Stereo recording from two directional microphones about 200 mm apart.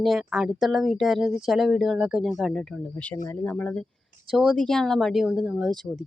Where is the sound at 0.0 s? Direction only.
Centre (ahead or behind).